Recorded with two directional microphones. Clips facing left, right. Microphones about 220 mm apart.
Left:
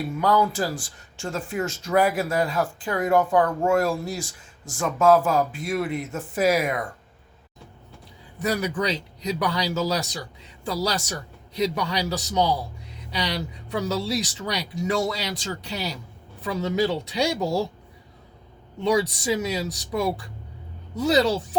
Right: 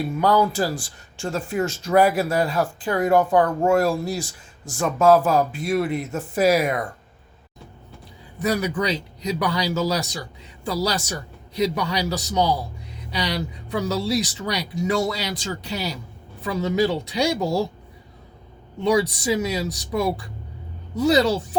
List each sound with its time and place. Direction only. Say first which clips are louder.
0.2 s speech: right 2 dB; 35° right (ahead or behind)
8.4 s speech: right 2 dB; centre (ahead or behind)
18.8 s speech: right 2 dB; centre (ahead or behind)